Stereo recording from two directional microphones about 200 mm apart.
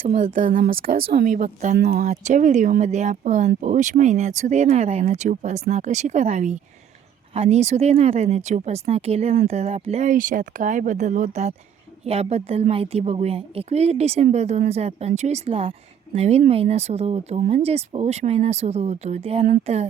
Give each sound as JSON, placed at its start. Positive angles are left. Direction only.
{"t": 0.1, "sound": "a woman's voice", "side_deg": -40}